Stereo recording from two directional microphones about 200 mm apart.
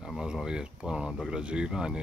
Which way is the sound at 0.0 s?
5° right (ahead or behind).